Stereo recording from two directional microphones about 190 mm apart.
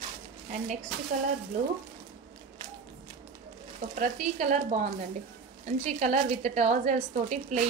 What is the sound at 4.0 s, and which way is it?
A woman's voice, 40° right (ahead or behind).